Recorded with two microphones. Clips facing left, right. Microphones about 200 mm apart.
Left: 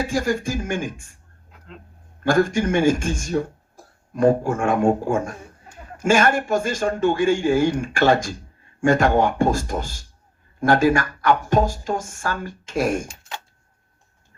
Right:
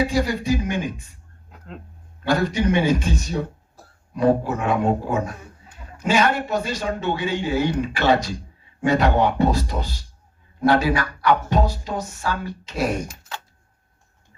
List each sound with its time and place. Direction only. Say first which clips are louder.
0.0 s a man's voice: right 1 dB; 50° left (ahead or behind)
2.2 s a man's voice: left 2 dB; 50° left (ahead or behind)
13.1 s a sound: even; 25° left (ahead or behind)